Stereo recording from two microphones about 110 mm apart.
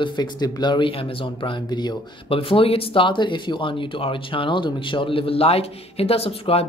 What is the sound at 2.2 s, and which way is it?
Speech, 55° left (ahead or behind).